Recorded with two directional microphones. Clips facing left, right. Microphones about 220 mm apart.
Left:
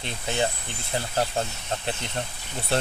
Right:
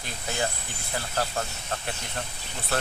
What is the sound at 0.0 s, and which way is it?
Speech, 25° left (ahead or behind).